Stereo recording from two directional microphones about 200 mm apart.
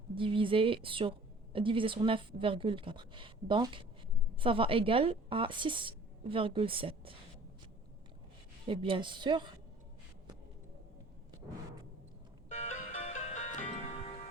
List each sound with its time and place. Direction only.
0.1 s a woman's voice: 25° right (ahead or behind)
8.6 s a woman's voice: 25° right (ahead or behind)
12.5 s music: 35° left (ahead or behind)